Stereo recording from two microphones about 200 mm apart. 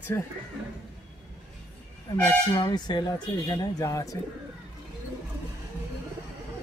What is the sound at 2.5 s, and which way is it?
Speech, 20° left (ahead or behind).